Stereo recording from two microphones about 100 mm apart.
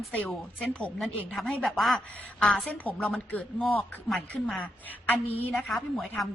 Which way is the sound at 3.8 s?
Centre (ahead or behind).